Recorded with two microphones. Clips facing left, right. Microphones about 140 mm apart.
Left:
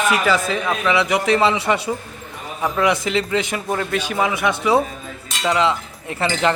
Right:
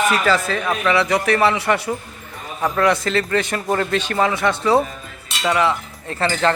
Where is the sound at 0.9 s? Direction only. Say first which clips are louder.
Even; 15° left (ahead or behind).